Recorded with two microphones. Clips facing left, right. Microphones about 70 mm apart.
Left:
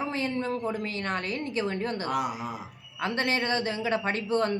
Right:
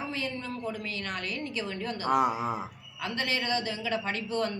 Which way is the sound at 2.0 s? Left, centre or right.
Right.